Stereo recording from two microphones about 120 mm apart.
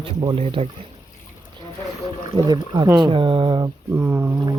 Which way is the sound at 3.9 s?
15° right (ahead or behind).